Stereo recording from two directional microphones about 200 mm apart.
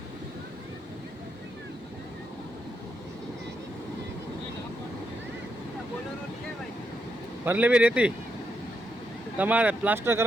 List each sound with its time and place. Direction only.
7.4 s speech: 10° right (ahead or behind)
9.4 s speech: 5° right (ahead or behind)